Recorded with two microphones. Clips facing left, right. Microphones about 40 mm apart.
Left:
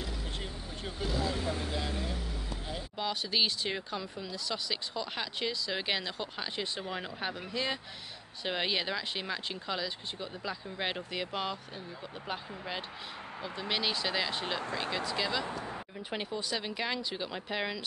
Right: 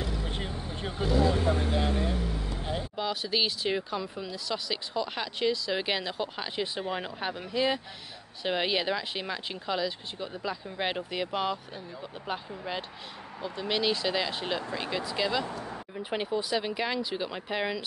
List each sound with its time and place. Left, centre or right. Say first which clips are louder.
0.4 s vehicle: right 5 dB; right
1.0 s vehicle: right 8 dB; centre
1.4 s vehicle: right 7 dB; right
3.0 s speech: right 1 dB; centre
15.4 s speech: right 1 dB; left
16.0 s speech: right 7 dB; centre